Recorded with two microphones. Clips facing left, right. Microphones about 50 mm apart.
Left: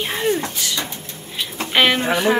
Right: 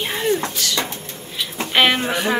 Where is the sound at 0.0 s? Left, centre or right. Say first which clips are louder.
Even; centre.